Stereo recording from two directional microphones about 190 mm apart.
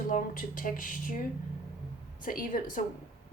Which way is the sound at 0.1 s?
45° left (ahead or behind).